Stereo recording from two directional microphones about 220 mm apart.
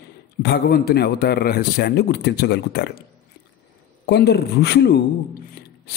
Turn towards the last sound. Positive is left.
turn(degrees=50)  # may be behind; listen again after turning